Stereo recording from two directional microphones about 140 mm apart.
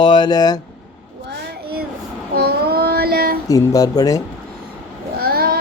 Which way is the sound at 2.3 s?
90° right.